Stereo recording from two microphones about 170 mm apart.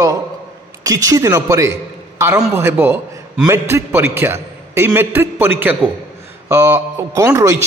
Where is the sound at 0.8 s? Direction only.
20° right (ahead or behind).